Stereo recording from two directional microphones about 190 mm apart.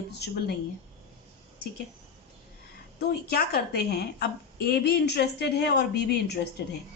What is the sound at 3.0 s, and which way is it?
A woman's voice, 55° left (ahead or behind).